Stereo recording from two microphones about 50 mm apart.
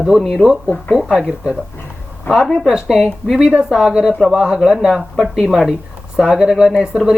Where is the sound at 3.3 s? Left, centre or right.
Right.